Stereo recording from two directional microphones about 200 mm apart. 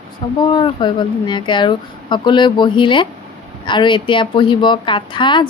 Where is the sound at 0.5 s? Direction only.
25° left (ahead or behind).